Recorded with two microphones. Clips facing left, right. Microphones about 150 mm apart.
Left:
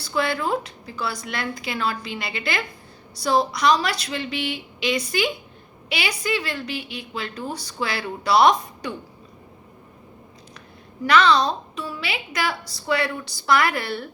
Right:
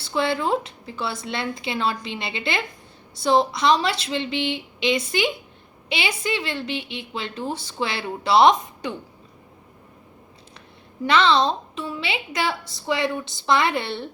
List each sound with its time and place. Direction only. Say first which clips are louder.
0.0 s a woman's voice: right 1 dB; 25° right (ahead or behind)
11.0 s a woman's voice: left 1 dB; 25° right (ahead or behind)